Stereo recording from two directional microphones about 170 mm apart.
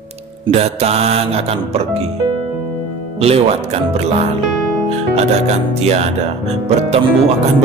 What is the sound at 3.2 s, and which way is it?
Music, 35° right (ahead or behind).